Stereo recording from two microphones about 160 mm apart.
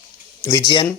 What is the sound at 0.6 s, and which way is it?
Speech, 30° left (ahead or behind).